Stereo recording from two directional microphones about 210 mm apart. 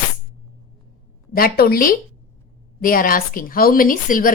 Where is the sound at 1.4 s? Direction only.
45° left (ahead or behind).